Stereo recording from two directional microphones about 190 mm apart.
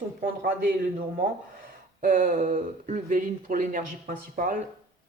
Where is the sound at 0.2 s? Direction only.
50° right (ahead or behind).